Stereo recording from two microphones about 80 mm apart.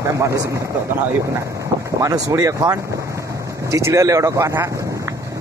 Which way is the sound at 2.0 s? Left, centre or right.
Right.